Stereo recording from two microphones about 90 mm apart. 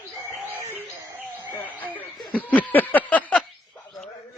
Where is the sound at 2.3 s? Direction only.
20° left (ahead or behind).